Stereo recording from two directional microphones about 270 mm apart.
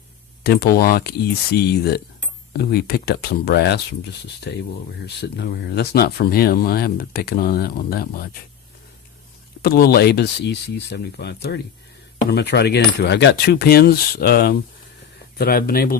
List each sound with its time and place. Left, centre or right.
0.4 s speech: left
9.6 s speech: left